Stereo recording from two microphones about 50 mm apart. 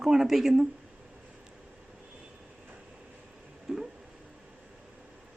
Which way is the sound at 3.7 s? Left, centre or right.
Centre.